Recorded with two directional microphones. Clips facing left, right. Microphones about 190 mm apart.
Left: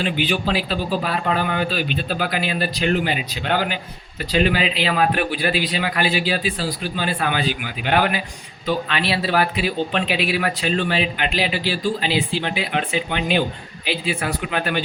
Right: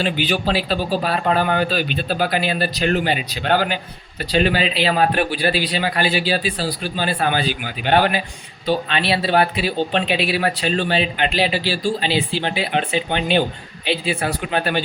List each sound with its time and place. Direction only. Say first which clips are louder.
0.0 s speech: right 1 dB; 35° right (ahead or behind)